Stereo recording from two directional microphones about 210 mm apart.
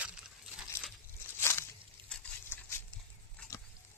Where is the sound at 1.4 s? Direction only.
10° left (ahead or behind).